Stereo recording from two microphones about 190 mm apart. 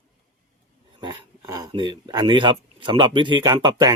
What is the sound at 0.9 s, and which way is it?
Speech, 20° right (ahead or behind).